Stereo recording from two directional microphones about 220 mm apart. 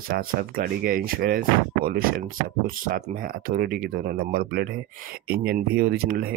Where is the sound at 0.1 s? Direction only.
40° right (ahead or behind).